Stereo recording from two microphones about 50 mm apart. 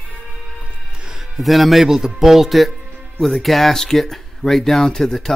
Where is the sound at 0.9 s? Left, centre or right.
Centre.